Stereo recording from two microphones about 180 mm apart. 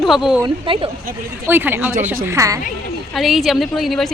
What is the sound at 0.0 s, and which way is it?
Speech, centre (ahead or behind).